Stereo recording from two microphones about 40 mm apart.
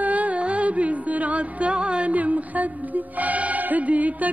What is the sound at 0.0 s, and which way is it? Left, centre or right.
Music, right.